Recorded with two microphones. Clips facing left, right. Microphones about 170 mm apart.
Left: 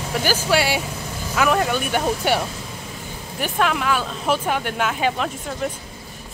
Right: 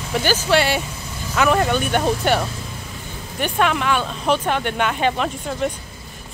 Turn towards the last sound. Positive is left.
turn(degrees=0)  # may be behind; listen again after turning